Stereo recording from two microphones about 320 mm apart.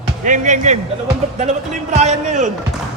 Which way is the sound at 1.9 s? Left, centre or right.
Right.